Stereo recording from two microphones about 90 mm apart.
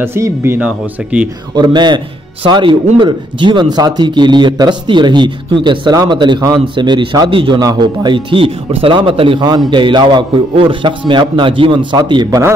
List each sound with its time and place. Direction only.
0.0 s speech: 25° right (ahead or behind)
0.6 s speech: 15° right (ahead or behind)
1.5 s a man's voice: 55° right (ahead or behind); by 9.4 s 85° right
9.7 s speech: 65° right (ahead or behind)